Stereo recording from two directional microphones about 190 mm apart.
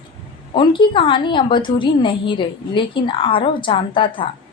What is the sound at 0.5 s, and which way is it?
A woman's voice, 25° left (ahead or behind).